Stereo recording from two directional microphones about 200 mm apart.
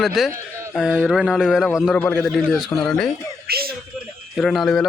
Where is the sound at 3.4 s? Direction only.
50° right (ahead or behind).